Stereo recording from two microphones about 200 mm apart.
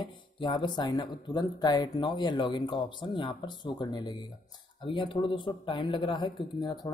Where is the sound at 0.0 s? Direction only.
25° left (ahead or behind).